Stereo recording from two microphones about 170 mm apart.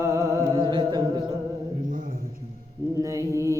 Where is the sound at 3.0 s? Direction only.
20° right (ahead or behind).